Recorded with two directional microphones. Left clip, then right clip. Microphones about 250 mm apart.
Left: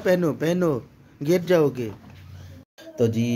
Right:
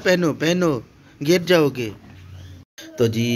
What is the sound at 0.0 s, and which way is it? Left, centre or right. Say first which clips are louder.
Speech: right 3 dB; centre.